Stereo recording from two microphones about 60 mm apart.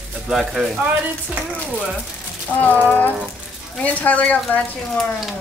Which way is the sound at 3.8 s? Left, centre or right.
Left.